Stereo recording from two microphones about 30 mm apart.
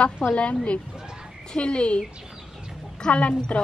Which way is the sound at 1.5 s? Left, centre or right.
Left.